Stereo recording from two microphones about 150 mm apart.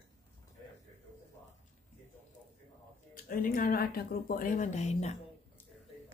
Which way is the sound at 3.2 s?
65° left (ahead or behind).